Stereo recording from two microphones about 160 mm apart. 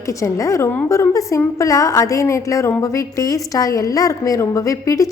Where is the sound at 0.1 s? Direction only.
20° left (ahead or behind).